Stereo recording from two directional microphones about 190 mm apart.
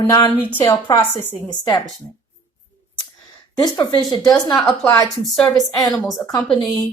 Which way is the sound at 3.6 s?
20° left (ahead or behind).